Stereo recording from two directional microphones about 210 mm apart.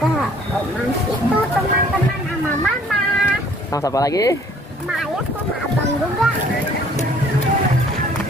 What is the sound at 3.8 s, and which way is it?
Speech, 15° left (ahead or behind).